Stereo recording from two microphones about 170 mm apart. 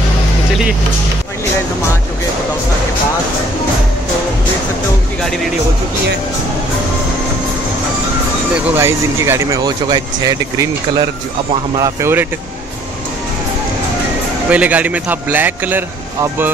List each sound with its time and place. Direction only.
8.7 s a man's voice: 15° right (ahead or behind)
14.5 s a man's voice: 10° right (ahead or behind)